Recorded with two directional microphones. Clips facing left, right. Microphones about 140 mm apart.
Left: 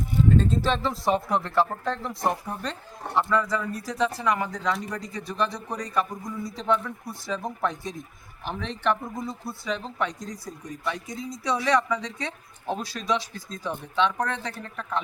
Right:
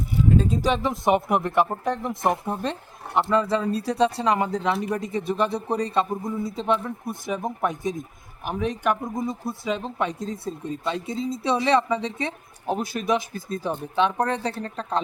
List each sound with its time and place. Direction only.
0.3 s speech: 10° right (ahead or behind)
14.4 s speech: 30° right (ahead or behind)